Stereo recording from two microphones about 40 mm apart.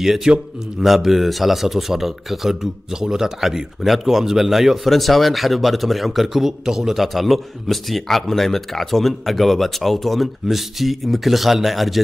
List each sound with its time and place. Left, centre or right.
0.0 s a man's voice: centre